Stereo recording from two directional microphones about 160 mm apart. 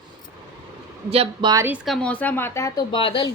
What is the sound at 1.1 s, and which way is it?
Speech, 35° right (ahead or behind).